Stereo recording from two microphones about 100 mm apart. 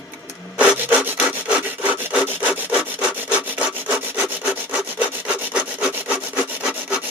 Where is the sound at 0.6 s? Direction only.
15° right (ahead or behind).